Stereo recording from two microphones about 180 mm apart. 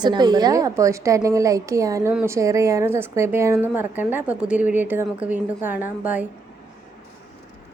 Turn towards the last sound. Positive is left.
turn(degrees=-10)  # may be behind; listen again after turning